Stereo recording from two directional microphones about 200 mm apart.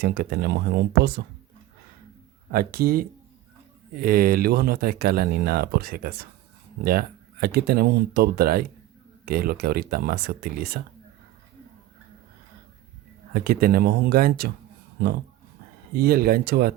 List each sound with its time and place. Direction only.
0.0 s speech: 55° right (ahead or behind)
2.5 s speech: 50° right (ahead or behind)
13.3 s speech: 50° right (ahead or behind)
16.0 s speech: 50° right (ahead or behind)